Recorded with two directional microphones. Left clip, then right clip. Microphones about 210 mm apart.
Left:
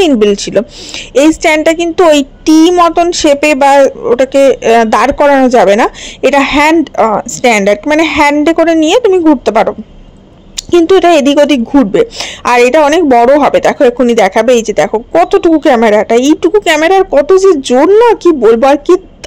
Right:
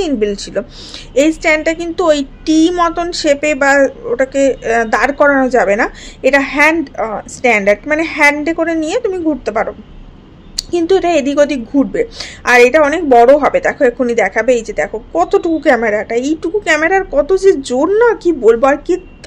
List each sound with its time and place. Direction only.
0.0 s a woman's voice: 40° left (ahead or behind)